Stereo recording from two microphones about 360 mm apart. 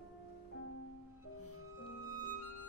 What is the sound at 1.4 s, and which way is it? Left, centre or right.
Music, left.